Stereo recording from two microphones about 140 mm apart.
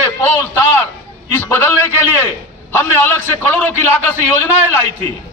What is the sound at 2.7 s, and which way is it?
A man's voice, 15° left (ahead or behind).